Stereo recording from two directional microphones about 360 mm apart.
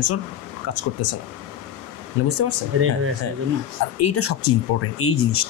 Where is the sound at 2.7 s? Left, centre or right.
Right.